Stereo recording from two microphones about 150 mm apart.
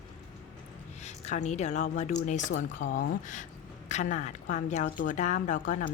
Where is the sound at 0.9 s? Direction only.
50° left (ahead or behind).